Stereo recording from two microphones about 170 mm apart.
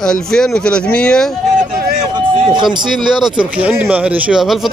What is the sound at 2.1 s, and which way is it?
Music, 25° right (ahead or behind).